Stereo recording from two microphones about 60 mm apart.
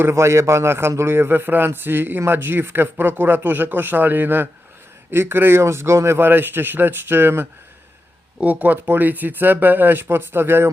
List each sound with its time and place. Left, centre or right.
0.0 s a man's voice: right
8.4 s a man's voice: right